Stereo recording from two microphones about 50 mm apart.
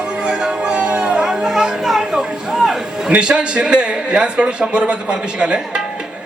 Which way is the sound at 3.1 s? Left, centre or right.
Right.